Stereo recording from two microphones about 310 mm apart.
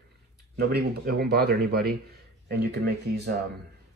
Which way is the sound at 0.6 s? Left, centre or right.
Right.